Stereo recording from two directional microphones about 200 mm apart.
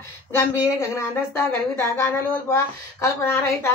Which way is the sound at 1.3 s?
10° left (ahead or behind).